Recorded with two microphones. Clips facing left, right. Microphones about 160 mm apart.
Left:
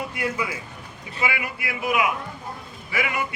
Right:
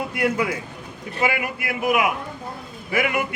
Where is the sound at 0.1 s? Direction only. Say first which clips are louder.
Right 5 dB; 60° right (ahead or behind).